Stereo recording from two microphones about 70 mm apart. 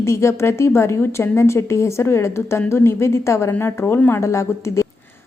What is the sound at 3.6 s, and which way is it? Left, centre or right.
Speech, left.